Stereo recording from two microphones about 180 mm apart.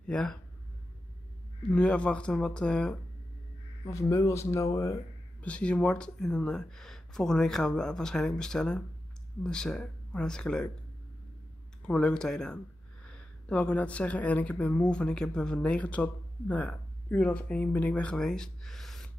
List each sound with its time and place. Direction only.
0.0 s speech: 5° left (ahead or behind)
1.7 s speech: 5° left (ahead or behind)
3.8 s speech: 15° left (ahead or behind)
11.9 s speech: 5° left (ahead or behind)